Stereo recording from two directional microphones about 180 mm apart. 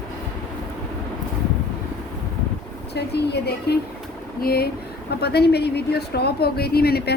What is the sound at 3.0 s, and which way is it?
Speech, 65° left (ahead or behind).